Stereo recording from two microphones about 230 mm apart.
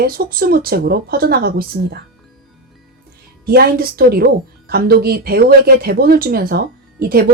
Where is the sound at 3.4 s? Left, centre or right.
Right.